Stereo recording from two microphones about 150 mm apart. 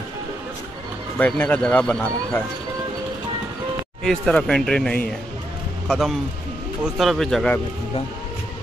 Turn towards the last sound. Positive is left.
turn(degrees=0)  # may be behind; listen again after turning